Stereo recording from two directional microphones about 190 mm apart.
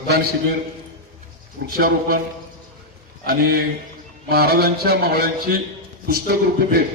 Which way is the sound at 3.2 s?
50° right (ahead or behind).